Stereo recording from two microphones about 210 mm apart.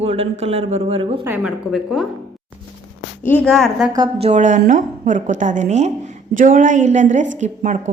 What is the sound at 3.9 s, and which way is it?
Speech, 20° right (ahead or behind).